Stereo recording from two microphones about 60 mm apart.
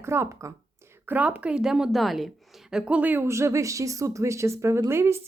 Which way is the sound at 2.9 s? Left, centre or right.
Right.